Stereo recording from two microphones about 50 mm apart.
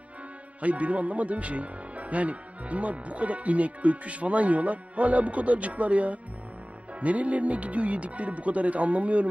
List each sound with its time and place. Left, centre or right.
0.6 s speech: right